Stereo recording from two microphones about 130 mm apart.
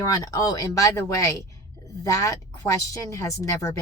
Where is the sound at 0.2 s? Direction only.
30° left (ahead or behind).